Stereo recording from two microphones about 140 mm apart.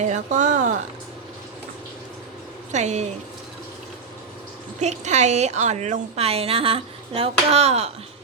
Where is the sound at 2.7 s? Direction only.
55° right (ahead or behind).